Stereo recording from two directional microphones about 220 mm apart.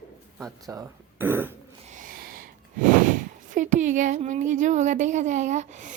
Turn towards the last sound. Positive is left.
turn(degrees=-35)  # may be behind; listen again after turning